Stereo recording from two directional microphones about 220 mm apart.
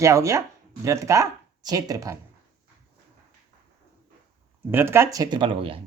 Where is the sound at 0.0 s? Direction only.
15° right (ahead or behind).